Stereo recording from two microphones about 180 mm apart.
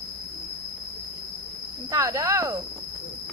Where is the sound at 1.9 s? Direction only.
20° right (ahead or behind).